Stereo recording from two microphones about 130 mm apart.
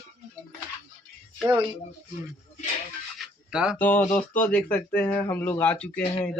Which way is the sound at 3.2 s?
5° right (ahead or behind).